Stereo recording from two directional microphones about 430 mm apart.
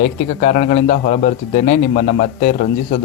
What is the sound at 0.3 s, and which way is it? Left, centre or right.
A man's voice, centre.